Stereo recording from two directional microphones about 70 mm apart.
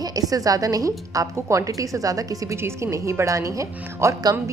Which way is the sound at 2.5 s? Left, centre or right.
Right.